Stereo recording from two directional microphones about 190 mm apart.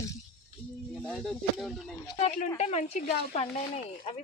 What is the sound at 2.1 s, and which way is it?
Speech, 35° left (ahead or behind).